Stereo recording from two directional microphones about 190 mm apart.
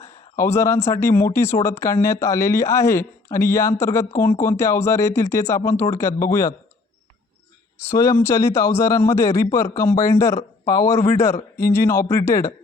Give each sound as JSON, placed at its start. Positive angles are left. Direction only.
{"t": 0.3, "sound": "speech", "side_deg": 15}
{"t": 7.8, "sound": "speech", "side_deg": 15}